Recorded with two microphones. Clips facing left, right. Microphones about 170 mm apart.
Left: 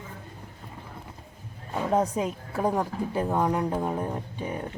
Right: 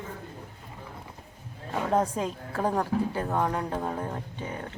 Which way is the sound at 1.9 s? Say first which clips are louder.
Left 2 dB; 10° left (ahead or behind).